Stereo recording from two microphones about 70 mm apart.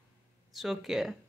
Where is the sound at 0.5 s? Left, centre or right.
Centre.